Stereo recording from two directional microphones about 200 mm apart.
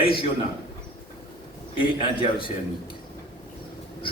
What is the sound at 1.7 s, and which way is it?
Speech, 25° left (ahead or behind).